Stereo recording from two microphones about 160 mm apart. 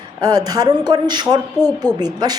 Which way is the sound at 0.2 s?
25° right (ahead or behind).